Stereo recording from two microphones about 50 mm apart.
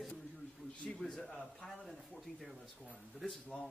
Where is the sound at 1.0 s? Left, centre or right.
Left.